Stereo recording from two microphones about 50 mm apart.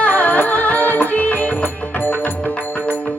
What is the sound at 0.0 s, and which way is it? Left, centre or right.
Music, left.